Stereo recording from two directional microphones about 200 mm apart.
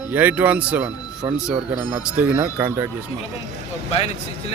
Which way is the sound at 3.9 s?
30° left (ahead or behind).